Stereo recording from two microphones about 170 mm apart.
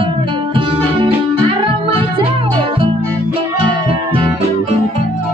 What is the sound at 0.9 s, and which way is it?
Music, 30° right (ahead or behind).